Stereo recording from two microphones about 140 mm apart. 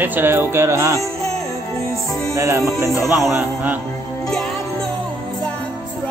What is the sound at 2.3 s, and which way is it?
Music, 20° right (ahead or behind).